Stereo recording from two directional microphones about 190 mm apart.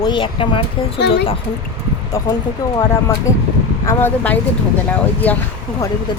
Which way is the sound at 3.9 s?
10° left (ahead or behind).